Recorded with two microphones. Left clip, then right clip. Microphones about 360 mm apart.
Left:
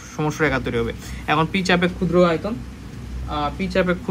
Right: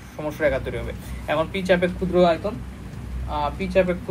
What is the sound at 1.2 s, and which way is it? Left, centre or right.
Speech, left.